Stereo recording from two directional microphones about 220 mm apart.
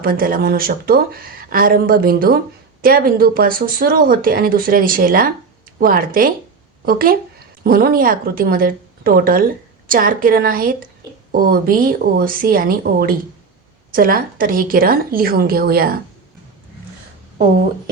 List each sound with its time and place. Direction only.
0.0 s a woman's voice: 40° right (ahead or behind)